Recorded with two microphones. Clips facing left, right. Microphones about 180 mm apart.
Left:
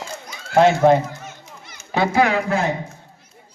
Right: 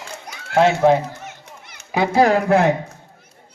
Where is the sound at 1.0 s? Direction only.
65° right (ahead or behind).